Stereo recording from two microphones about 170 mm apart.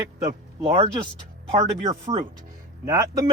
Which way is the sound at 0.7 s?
35° right (ahead or behind).